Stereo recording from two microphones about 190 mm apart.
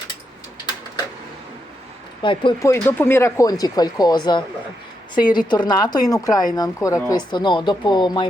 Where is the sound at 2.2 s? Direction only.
25° left (ahead or behind).